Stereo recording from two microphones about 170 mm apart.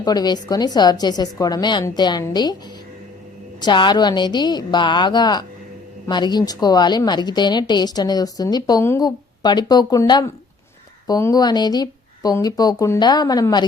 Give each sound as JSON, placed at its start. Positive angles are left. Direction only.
{"t": 0.0, "sound": "a woman's voice", "side_deg": 25}
{"t": 3.6, "sound": "a woman's voice", "side_deg": 25}